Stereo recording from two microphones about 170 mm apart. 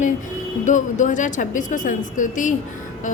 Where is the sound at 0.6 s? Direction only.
45° left (ahead or behind).